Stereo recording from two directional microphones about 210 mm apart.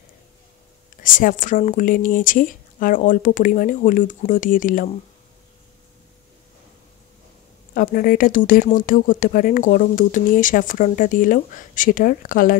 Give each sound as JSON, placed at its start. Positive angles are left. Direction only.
{"t": 1.0, "sound": "speech", "side_deg": 40}
{"t": 7.7, "sound": "speech", "side_deg": 40}